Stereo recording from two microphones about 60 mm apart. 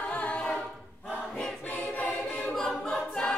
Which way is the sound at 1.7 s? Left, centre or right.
Left.